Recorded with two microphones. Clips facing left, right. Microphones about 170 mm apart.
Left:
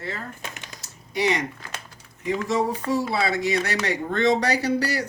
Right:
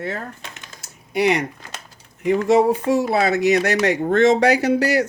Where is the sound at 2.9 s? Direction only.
50° right (ahead or behind).